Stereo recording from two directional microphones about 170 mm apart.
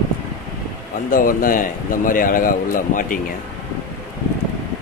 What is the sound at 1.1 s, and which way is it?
A man's voice, 55° left (ahead or behind).